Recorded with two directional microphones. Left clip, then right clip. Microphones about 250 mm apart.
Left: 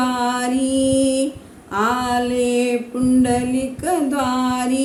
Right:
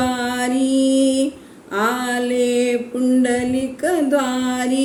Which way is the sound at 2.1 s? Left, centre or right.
Centre.